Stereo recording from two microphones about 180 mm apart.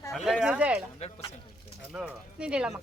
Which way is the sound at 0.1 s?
Centre (ahead or behind).